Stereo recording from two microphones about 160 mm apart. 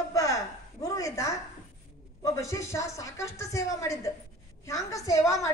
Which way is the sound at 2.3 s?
20° left (ahead or behind).